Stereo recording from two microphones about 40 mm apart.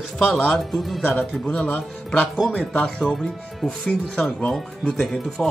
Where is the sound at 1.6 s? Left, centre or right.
Left.